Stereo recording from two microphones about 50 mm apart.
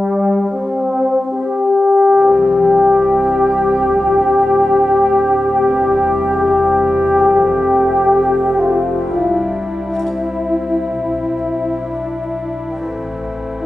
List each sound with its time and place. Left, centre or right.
0.0 s brass instrument: centre
7.3 s music: centre